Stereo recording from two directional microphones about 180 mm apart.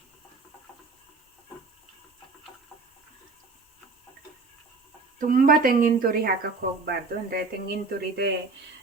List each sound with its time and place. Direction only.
5.2 s speech: 50° right (ahead or behind)